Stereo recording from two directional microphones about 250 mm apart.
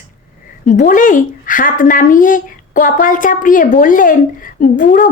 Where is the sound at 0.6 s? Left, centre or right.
Left.